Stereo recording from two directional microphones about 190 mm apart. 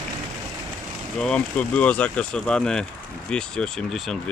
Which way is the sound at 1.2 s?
5° left (ahead or behind).